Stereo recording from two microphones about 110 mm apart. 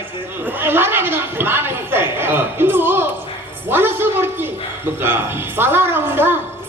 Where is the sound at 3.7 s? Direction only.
20° right (ahead or behind).